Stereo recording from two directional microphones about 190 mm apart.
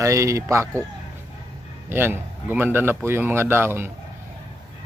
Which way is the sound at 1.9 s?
10° right (ahead or behind).